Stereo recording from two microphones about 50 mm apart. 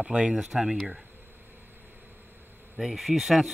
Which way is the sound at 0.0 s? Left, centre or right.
Centre.